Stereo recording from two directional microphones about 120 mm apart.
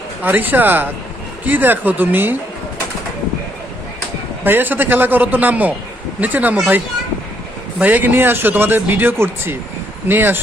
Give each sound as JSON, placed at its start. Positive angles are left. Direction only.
{"t": 0.2, "sound": "speech", "side_deg": -15}
{"t": 4.4, "sound": "speech", "side_deg": -15}